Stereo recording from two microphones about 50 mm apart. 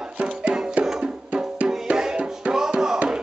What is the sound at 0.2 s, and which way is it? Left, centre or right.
Music, right.